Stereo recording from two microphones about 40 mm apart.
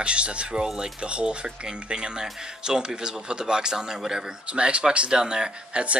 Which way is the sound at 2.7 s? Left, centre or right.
Centre.